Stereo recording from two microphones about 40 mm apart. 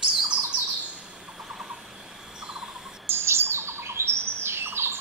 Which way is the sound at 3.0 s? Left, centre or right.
Right.